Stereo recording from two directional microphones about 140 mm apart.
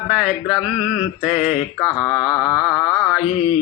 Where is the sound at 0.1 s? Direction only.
5° right (ahead or behind).